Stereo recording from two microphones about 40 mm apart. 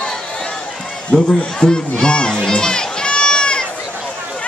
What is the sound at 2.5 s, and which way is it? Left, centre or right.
Run, centre.